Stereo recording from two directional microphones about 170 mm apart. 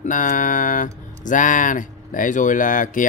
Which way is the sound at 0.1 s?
50° left (ahead or behind).